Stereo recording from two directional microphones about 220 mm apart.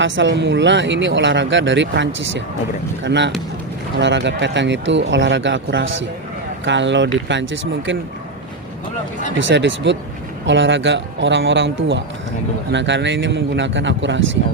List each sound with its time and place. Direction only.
0.0 s speech: 55° right (ahead or behind)
9.4 s speech: 55° right (ahead or behind)